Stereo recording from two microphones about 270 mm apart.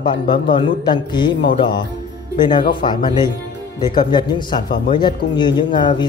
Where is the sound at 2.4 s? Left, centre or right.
Centre.